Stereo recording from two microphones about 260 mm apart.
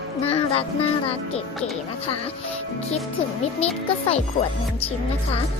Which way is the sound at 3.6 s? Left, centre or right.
Left.